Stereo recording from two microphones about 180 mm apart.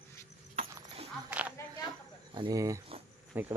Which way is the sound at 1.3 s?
10° right (ahead or behind).